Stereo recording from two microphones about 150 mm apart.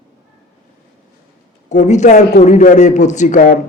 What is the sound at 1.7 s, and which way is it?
Speech, 55° left (ahead or behind).